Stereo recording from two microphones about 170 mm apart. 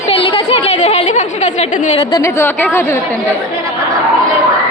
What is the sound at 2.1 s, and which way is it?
A woman's voice, 15° left (ahead or behind).